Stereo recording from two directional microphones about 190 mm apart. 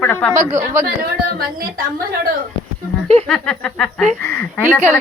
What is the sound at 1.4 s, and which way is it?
Speech, 50° right (ahead or behind).